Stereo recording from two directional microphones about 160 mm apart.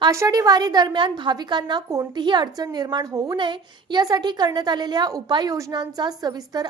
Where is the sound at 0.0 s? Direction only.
20° right (ahead or behind).